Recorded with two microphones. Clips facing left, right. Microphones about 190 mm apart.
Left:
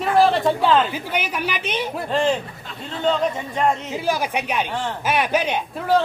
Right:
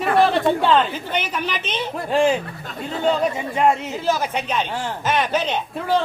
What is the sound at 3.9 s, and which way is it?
A man's voice, 10° left (ahead or behind).